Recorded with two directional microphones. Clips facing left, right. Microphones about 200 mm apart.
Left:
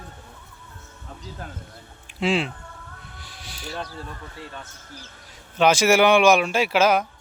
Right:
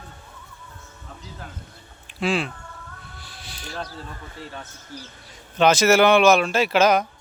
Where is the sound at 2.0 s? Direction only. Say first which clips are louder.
Left 1 dB; 25° left (ahead or behind).